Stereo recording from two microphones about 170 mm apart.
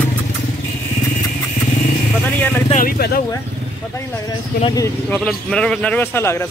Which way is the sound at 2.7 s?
60° left (ahead or behind).